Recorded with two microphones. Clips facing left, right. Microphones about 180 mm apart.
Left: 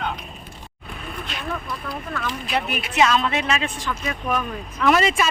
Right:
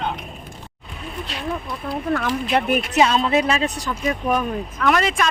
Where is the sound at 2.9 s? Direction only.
30° right (ahead or behind).